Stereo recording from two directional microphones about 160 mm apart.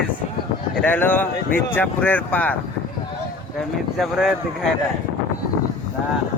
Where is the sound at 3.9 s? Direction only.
Centre (ahead or behind).